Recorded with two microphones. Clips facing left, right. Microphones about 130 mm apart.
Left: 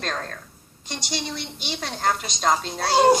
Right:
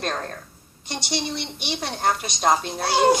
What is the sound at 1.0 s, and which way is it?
A woman's voice, 20° right (ahead or behind).